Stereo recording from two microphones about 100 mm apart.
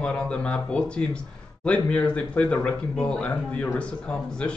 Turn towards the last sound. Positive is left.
turn(degrees=10)  # may be behind; listen again after turning